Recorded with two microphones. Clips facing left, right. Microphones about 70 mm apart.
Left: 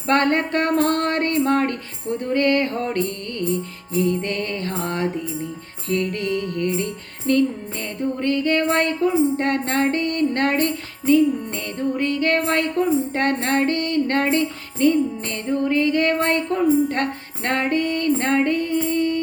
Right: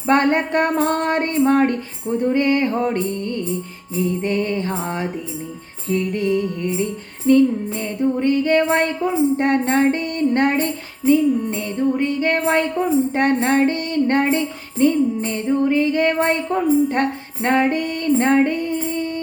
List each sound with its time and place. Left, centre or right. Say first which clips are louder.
0.1 s music: right 2 dB; centre